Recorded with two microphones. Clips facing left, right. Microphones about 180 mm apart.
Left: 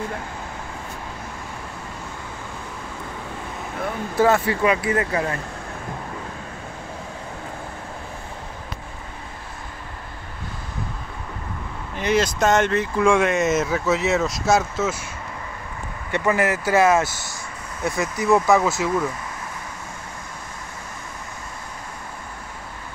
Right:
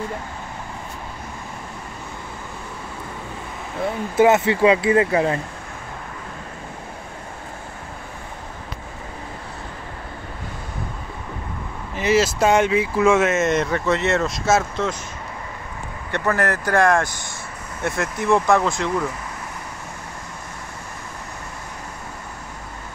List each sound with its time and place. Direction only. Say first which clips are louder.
3.8 s speech: right 3 dB; 20° right (ahead or behind)
11.9 s speech: right 2 dB; 5° right (ahead or behind)
16.1 s speech: left 1 dB; 10° left (ahead or behind)